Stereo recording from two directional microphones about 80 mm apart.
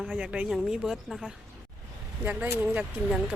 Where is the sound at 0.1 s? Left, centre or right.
Centre.